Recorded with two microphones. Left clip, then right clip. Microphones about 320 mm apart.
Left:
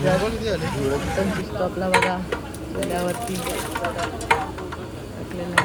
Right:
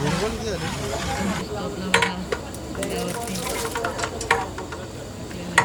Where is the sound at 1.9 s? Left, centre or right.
Centre.